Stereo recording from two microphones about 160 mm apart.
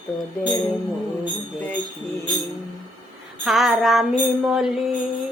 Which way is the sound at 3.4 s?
Centre (ahead or behind).